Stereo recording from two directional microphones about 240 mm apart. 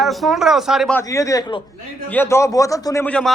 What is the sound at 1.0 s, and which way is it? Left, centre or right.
A man's voice, centre.